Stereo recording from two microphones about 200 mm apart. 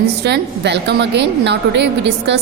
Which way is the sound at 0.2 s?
55° right (ahead or behind).